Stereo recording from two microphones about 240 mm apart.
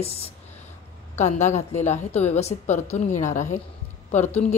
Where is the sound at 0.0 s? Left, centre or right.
Left.